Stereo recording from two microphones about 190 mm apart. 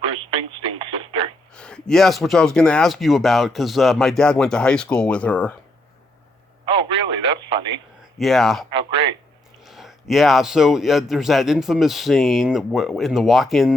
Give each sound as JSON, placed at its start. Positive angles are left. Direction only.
{"t": 0.0, "sound": "radio", "side_deg": -30}
{"t": 1.5, "sound": "a man's voice", "side_deg": 5}
{"t": 6.7, "sound": "radio", "side_deg": -30}
{"t": 8.2, "sound": "a man's voice", "side_deg": 0}
{"t": 8.7, "sound": "speech", "side_deg": -30}
{"t": 9.6, "sound": "a man's voice", "side_deg": 0}